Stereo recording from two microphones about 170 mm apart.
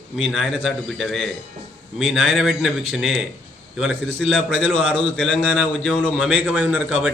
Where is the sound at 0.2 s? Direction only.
Centre (ahead or behind).